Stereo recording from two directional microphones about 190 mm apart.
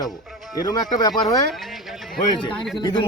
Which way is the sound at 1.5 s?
Centre (ahead or behind).